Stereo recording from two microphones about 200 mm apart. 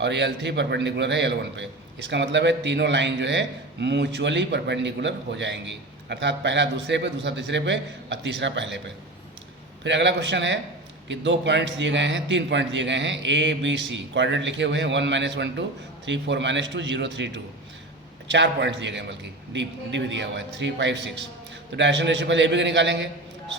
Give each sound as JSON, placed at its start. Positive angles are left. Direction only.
{"t": 0.0, "sound": "a man's voice", "side_deg": -60}
{"t": 9.8, "sound": "a man's voice", "side_deg": -60}